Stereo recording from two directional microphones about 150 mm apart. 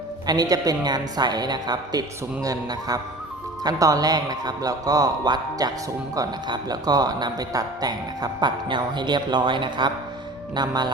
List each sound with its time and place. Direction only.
0.3 s speech: 25° right (ahead or behind)